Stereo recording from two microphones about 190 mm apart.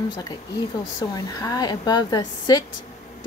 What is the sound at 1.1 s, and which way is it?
Speech, 20° left (ahead or behind).